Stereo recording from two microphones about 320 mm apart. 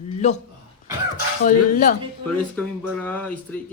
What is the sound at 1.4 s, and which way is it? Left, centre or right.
Speech, left.